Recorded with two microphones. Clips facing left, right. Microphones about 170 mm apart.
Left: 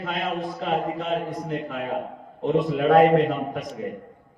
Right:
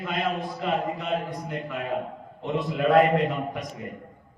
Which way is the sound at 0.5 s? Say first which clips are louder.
Left 2 dB; 45° left (ahead or behind).